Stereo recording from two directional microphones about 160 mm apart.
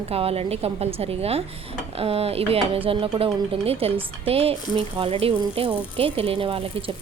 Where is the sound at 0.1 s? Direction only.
40° right (ahead or behind).